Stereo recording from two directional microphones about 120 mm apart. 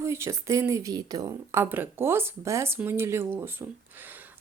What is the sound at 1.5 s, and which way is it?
Speech, 20° right (ahead or behind).